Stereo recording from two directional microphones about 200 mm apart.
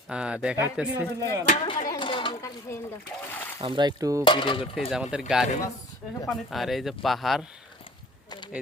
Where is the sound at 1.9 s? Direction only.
25° left (ahead or behind).